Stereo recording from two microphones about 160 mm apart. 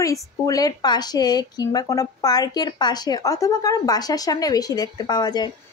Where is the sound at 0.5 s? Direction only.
25° left (ahead or behind).